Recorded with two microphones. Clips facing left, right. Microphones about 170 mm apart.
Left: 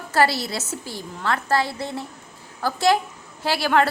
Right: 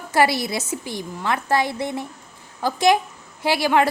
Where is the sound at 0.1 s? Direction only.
15° right (ahead or behind).